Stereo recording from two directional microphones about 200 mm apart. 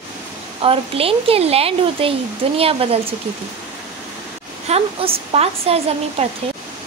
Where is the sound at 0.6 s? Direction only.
30° right (ahead or behind).